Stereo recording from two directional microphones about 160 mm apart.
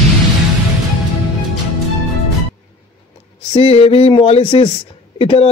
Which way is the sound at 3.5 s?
40° left (ahead or behind).